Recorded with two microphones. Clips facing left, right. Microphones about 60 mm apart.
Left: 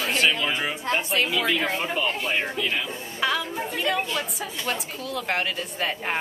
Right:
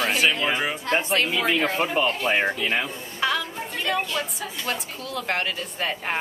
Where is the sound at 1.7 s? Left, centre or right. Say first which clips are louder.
Right 3 dB; right.